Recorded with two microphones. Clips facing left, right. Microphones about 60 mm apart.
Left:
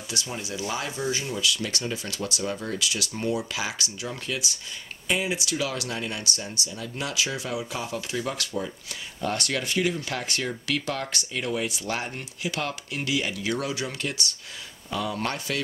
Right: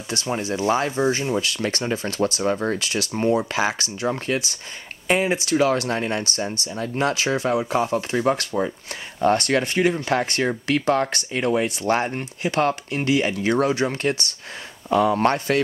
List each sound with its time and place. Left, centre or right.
0.1 s speech: right